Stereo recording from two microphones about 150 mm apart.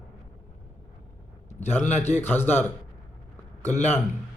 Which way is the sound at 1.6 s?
15° left (ahead or behind).